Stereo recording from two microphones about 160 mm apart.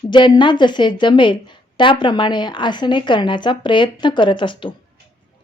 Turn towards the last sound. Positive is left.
turn(degrees=30)  # may be behind; listen again after turning